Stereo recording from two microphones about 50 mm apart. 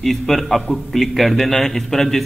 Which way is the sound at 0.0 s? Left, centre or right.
Centre.